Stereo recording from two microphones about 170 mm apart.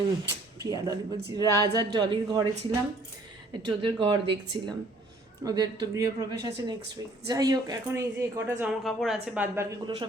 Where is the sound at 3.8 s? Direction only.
30° right (ahead or behind); by 8.7 s 15° right (ahead or behind).